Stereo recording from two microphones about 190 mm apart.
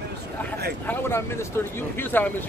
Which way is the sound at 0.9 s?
10° left (ahead or behind).